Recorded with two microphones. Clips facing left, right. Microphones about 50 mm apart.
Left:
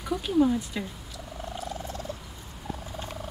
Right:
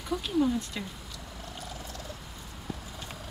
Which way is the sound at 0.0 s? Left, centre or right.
Centre.